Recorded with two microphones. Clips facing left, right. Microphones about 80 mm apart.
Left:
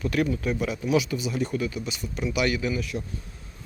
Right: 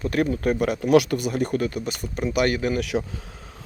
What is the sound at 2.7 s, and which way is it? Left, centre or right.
Speech, right.